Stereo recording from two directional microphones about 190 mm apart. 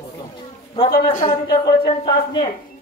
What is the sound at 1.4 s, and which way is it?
A man's voice, 20° left (ahead or behind).